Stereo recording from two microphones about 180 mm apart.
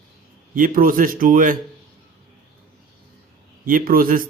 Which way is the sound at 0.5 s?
50° right (ahead or behind).